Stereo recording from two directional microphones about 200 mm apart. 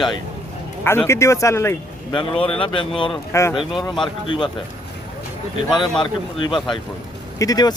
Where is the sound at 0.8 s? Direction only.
10° left (ahead or behind).